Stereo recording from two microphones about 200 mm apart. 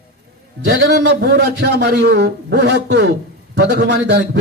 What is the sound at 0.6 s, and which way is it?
A man's voice, 60° right (ahead or behind).